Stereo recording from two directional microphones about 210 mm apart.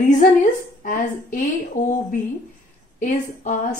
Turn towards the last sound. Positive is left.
turn(degrees=35)  # may be behind; listen again after turning